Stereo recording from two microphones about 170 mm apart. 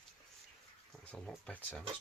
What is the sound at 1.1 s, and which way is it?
Speech, centre (ahead or behind).